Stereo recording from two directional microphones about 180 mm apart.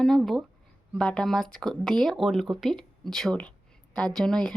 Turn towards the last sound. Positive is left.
turn(degrees=5)  # may be behind; listen again after turning